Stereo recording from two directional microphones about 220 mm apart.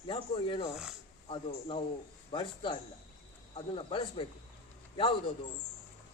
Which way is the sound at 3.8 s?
25° left (ahead or behind).